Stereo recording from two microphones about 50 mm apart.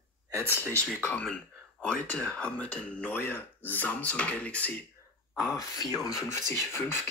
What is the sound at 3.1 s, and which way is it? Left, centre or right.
Speech, left.